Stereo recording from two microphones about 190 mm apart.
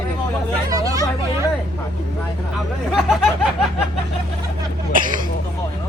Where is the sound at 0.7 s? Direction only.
20° right (ahead or behind).